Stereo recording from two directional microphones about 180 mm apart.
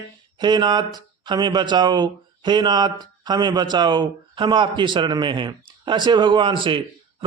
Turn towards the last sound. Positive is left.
turn(degrees=-30)  # may be behind; listen again after turning